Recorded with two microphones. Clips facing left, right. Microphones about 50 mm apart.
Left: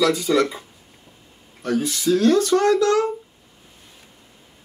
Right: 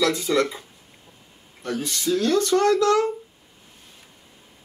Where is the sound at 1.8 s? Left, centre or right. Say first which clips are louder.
Left 5 dB; centre.